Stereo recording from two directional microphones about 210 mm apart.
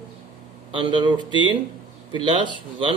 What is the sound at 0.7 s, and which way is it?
A man's voice, 25° right (ahead or behind).